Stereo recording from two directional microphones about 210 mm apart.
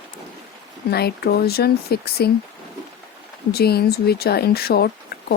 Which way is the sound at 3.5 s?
50° left (ahead or behind).